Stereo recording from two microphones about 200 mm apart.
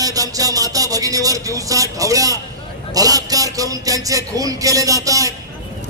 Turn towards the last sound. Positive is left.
turn(degrees=-15)  # may be behind; listen again after turning